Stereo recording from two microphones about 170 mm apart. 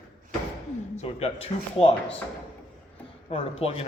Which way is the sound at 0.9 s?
40° left (ahead or behind).